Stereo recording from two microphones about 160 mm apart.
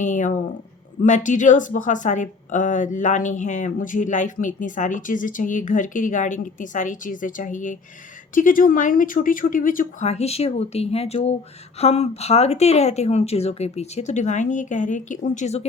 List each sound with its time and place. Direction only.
0.0 s speech: 50° left (ahead or behind)
10.1 s speech: 40° left (ahead or behind)